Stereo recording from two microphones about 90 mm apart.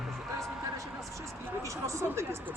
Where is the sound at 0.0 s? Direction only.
Centre (ahead or behind).